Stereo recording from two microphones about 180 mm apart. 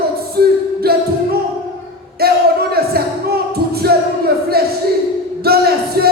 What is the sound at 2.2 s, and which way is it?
Music, 60° right (ahead or behind).